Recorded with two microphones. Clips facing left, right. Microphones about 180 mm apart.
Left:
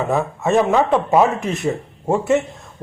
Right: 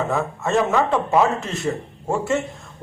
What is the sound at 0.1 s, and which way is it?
A man's voice, 20° left (ahead or behind).